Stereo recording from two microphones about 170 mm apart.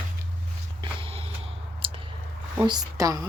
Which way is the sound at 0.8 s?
30° right (ahead or behind).